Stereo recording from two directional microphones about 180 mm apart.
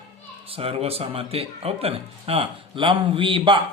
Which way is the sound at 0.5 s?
30° right (ahead or behind).